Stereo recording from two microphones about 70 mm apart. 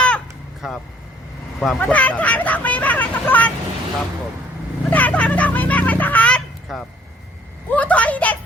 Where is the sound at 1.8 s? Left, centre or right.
Left.